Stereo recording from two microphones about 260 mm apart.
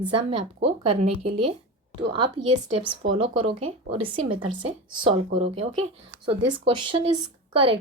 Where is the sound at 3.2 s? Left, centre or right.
Centre.